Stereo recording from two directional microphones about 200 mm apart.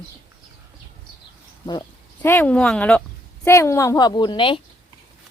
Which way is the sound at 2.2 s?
10° left (ahead or behind).